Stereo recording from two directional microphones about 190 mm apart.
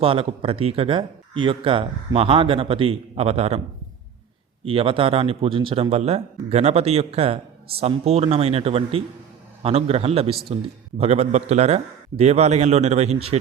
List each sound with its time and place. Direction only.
0.0 s speech: 30° right (ahead or behind)
4.6 s a man's voice: 30° right (ahead or behind)